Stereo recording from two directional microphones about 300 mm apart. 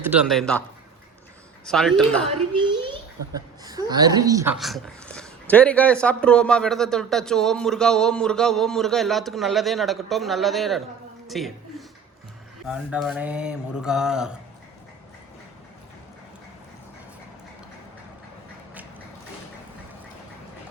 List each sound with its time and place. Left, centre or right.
0.0 s a woman's voice: centre
1.6 s a woman's voice: centre
2.5 s a child's voice: centre
12.6 s a woman's voice: centre